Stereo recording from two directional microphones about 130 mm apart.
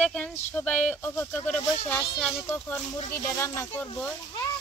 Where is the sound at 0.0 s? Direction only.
10° left (ahead or behind).